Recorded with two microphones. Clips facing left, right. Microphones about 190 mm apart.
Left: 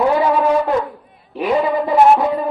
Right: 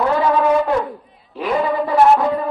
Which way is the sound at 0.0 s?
10° left (ahead or behind).